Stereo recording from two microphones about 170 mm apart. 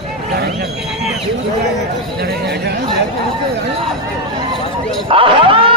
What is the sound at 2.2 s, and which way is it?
Speech, 75° right (ahead or behind).